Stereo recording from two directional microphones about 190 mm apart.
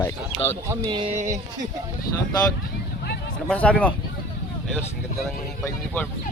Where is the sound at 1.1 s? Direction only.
40° right (ahead or behind).